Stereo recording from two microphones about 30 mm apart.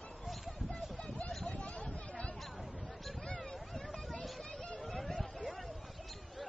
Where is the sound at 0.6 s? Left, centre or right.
Left.